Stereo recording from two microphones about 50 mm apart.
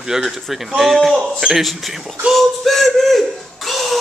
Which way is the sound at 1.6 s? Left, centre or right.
Centre.